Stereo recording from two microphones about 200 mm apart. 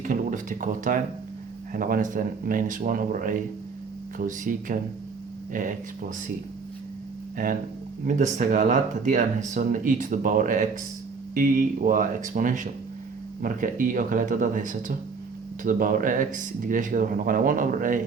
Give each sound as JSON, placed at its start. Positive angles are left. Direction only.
{"t": 0.0, "sound": "speech", "side_deg": -40}
{"t": 7.3, "sound": "speech", "side_deg": -45}